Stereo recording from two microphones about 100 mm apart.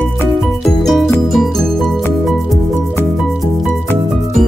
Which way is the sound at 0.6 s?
Centre (ahead or behind).